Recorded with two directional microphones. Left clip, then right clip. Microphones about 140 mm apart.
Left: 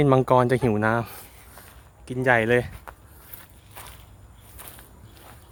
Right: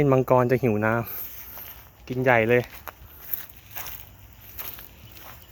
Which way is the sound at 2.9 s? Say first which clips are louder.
Right 3 dB; 90° right.